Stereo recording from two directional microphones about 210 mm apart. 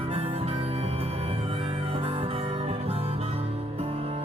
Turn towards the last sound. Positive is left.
turn(degrees=-30)  # may be behind; listen again after turning